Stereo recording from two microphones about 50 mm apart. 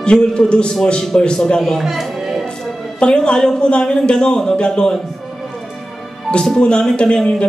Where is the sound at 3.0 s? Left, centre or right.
Centre.